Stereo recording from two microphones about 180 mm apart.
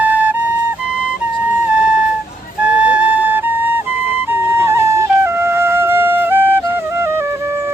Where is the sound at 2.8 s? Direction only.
5° right (ahead or behind).